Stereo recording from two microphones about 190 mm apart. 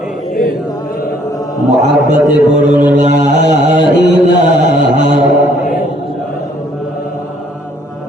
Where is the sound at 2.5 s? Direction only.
40° right (ahead or behind).